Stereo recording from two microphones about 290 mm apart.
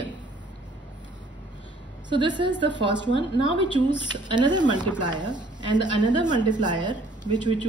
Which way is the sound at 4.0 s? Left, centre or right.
Centre.